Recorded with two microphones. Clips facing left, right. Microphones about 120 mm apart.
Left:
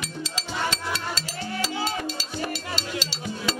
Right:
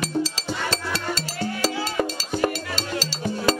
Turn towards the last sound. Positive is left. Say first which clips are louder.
# right 7 dB
turn(degrees=-45)  # may be behind; listen again after turning